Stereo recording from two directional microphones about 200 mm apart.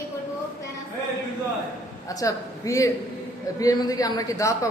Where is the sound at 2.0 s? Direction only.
15° left (ahead or behind).